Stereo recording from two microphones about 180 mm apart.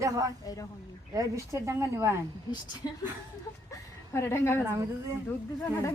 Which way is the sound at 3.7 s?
15° left (ahead or behind).